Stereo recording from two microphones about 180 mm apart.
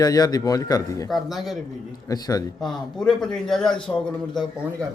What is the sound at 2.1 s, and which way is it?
Speech, 20° left (ahead or behind).